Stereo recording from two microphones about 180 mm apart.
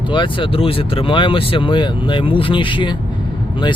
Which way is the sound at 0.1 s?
30° left (ahead or behind).